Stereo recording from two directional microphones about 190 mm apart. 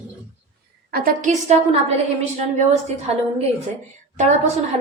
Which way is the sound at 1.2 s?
35° right (ahead or behind).